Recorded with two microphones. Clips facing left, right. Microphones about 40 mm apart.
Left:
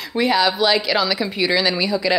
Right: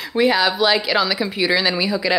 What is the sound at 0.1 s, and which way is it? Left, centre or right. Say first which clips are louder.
Speech: right 1 dB; centre.